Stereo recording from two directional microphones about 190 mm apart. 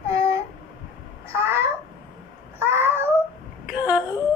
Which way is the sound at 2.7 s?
10° right (ahead or behind).